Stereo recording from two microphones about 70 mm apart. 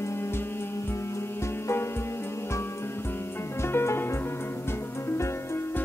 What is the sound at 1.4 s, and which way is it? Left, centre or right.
Music, left.